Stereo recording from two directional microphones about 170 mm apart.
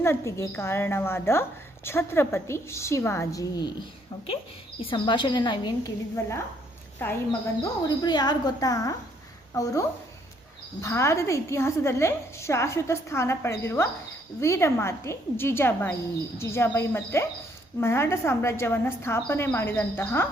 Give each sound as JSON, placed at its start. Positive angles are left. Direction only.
{"t": 0.0, "sound": "a woman's voice", "side_deg": 15}
{"t": 4.8, "sound": "a woman's voice", "side_deg": 30}
{"t": 7.6, "sound": "a woman's voice", "side_deg": 25}
{"t": 10.8, "sound": "a woman's voice", "side_deg": 15}